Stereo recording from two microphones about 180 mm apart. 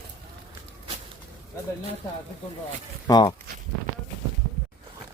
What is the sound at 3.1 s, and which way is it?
Speech, 25° left (ahead or behind).